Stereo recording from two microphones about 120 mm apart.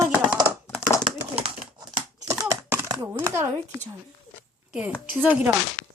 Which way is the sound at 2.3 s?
25° right (ahead or behind).